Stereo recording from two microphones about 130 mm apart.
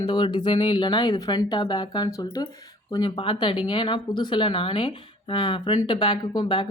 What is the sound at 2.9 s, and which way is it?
Speech, 40° left (ahead or behind).